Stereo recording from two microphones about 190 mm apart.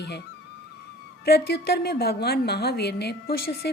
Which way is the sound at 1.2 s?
60° left (ahead or behind).